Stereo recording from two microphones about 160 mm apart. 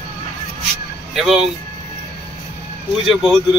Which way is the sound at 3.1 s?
Centre (ahead or behind).